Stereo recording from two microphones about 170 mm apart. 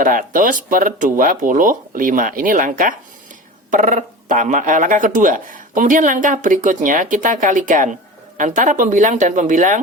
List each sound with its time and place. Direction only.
0.0 s speech: 50° right (ahead or behind)